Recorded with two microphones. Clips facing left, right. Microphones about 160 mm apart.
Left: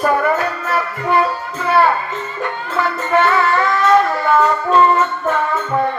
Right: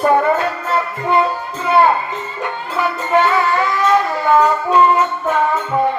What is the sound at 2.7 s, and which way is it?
Music, 15° right (ahead or behind).